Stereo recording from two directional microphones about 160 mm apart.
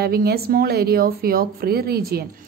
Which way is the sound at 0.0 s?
75° right (ahead or behind).